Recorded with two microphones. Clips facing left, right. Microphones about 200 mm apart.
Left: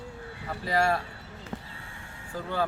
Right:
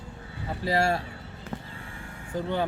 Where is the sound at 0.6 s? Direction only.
25° right (ahead or behind).